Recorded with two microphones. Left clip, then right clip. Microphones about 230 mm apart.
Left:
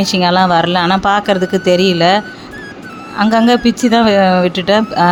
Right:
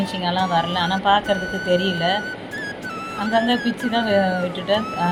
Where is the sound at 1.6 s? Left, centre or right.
Left.